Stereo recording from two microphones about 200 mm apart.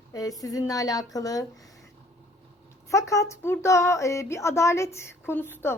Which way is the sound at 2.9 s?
15° left (ahead or behind).